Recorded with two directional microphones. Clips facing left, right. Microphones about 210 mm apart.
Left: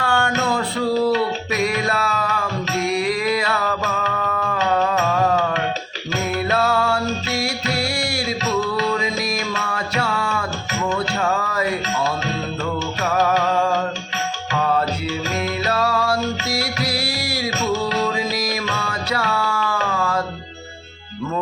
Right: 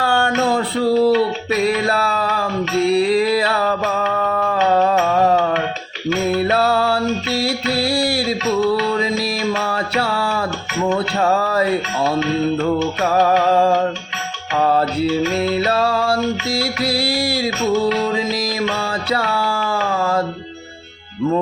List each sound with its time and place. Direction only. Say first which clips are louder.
0.0 s music: right 3 dB; 30° right (ahead or behind)
9.5 s music: right 5 dB; 30° right (ahead or behind)
10.8 s a sound: right 4 dB; 35° right (ahead or behind)
12.6 s music: right 6 dB; 30° right (ahead or behind)
18.6 s music: right 5 dB; 30° right (ahead or behind)